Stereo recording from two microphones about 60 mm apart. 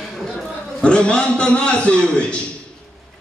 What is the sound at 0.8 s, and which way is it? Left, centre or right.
A man's voice, centre.